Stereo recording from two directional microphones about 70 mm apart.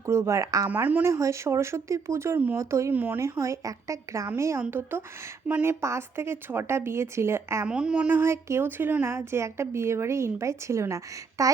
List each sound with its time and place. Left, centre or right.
0.0 s a woman's voice: right
0.7 s speech: right
1.0 s a woman's voice: right
2.9 s speech: right
3.2 s a woman's voice: right
7.7 s speech: centre
8.2 s speech: right
9.1 s a woman's voice: right